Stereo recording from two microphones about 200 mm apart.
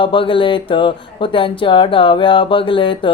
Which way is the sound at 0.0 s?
25° left (ahead or behind).